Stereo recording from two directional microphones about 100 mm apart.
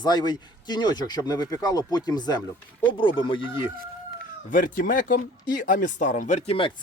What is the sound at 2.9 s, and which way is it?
Speech, 60° left (ahead or behind).